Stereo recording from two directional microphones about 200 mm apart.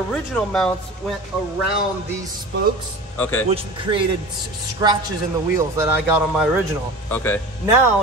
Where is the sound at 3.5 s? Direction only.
25° right (ahead or behind).